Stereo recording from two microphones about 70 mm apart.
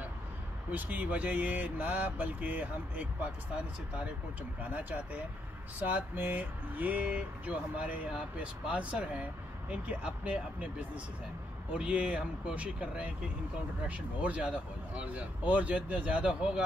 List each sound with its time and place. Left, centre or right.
0.7 s speech: right
4.7 s speech: right
11.7 s speech: centre